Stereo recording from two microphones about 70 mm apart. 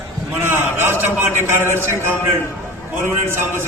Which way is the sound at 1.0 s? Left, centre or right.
Right.